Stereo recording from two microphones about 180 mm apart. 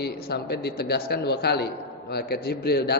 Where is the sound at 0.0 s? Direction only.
65° left (ahead or behind).